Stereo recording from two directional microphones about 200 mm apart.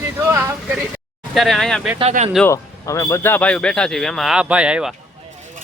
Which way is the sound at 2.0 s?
30° right (ahead or behind).